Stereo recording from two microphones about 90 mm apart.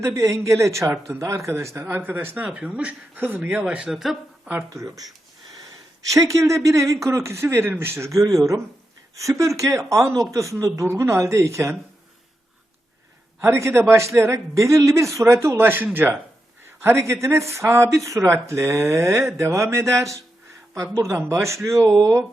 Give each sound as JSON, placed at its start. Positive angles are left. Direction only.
{"t": 0.0, "sound": "speech", "side_deg": -35}
{"t": 3.8, "sound": "speech", "side_deg": -5}
{"t": 4.7, "sound": "speech", "side_deg": -35}
{"t": 13.4, "sound": "speech", "side_deg": -30}